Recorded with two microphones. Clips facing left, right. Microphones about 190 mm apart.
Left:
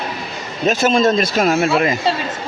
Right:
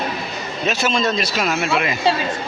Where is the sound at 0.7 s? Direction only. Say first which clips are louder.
Left 6 dB; 45° left (ahead or behind).